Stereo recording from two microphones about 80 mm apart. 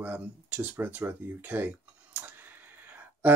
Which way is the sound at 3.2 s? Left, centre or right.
Centre.